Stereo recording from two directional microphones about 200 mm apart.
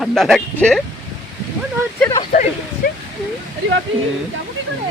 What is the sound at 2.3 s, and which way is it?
Speech, 40° left (ahead or behind).